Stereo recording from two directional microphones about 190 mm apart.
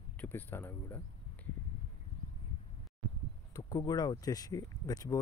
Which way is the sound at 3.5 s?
20° left (ahead or behind).